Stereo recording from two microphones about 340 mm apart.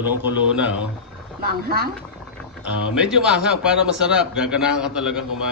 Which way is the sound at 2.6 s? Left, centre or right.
Centre.